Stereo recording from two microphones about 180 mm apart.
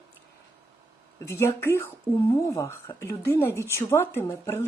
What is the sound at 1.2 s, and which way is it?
Speech, 15° left (ahead or behind).